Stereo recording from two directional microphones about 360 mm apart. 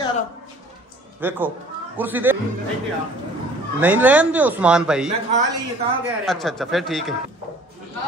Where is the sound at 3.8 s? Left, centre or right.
Centre.